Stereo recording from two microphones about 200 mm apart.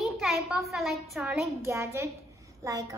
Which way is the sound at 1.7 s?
15° right (ahead or behind).